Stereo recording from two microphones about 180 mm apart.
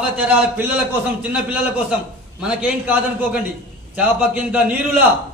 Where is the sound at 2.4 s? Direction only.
5° right (ahead or behind).